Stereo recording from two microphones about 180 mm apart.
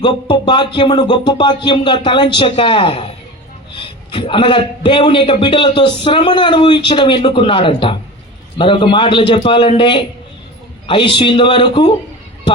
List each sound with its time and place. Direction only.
0.0 s a man's voice: 25° left (ahead or behind)